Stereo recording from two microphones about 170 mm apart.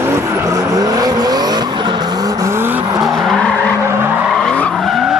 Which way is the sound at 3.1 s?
5° left (ahead or behind).